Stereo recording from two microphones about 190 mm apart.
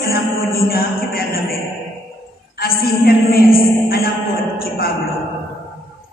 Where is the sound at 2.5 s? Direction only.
50° left (ahead or behind).